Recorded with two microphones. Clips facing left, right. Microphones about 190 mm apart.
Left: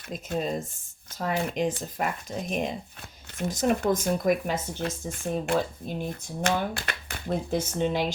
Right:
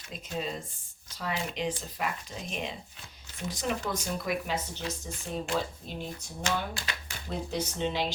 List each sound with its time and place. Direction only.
0.1 s speech: 45° left (ahead or behind)